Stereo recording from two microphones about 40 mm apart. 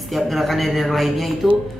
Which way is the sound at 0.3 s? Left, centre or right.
Centre.